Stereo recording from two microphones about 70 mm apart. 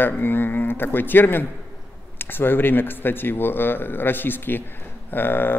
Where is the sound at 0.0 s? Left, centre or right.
Left.